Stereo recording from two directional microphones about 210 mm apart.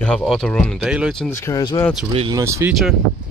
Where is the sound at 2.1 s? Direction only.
20° right (ahead or behind).